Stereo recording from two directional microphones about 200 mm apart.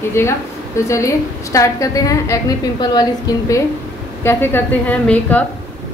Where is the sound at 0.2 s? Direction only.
10° left (ahead or behind).